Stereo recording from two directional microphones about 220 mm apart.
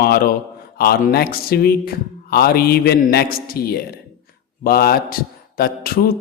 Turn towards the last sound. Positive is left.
turn(degrees=40)  # may be behind; listen again after turning